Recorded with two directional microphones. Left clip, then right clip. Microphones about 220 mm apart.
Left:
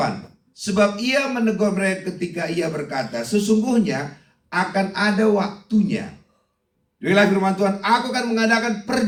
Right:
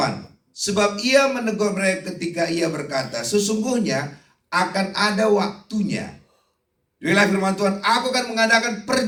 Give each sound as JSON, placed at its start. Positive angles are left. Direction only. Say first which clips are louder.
{"t": 0.5, "sound": "a man's voice", "louder": "left 1 dB", "side_deg": -45}
{"t": 7.0, "sound": "a man's voice", "louder": "left 1 dB", "side_deg": -45}